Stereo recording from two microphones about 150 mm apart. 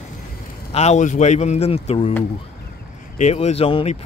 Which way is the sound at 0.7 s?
45° left (ahead or behind).